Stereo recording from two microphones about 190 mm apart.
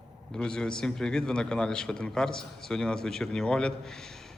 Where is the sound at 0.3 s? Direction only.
5° left (ahead or behind).